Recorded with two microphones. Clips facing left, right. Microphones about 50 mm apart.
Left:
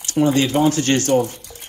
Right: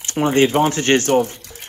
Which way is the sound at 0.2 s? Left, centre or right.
Right.